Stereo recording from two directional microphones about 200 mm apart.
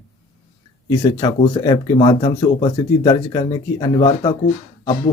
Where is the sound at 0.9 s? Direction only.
20° left (ahead or behind).